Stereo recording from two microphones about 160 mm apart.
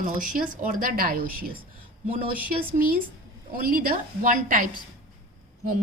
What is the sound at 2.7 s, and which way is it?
A woman's voice, 65° right (ahead or behind).